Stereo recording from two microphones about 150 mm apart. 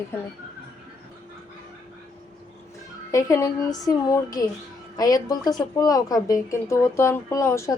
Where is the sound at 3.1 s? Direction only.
20° left (ahead or behind).